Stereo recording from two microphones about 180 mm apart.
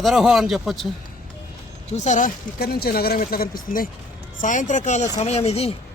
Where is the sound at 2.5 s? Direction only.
60° left (ahead or behind); by 5.8 s 35° left (ahead or behind).